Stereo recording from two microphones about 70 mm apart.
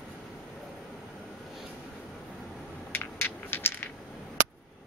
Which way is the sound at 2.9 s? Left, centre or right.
Left.